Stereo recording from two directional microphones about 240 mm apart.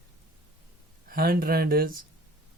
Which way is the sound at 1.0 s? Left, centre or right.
Right.